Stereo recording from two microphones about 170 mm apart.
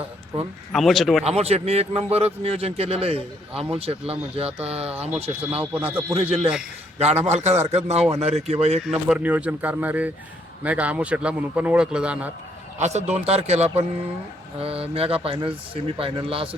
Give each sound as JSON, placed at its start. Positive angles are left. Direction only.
{"t": 0.7, "sound": "speech", "side_deg": 0}
{"t": 1.2, "sound": "a man's voice", "side_deg": -35}
{"t": 5.7, "sound": "speech", "side_deg": -10}
{"t": 6.1, "sound": "a man's voice", "side_deg": -35}
{"t": 9.0, "sound": "speech", "side_deg": -10}
{"t": 12.8, "sound": "a man's voice", "side_deg": -40}